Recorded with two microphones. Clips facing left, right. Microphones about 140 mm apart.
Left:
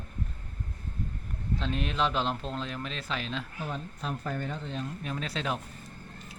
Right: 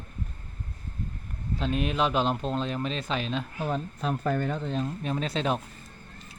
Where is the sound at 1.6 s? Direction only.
15° right (ahead or behind).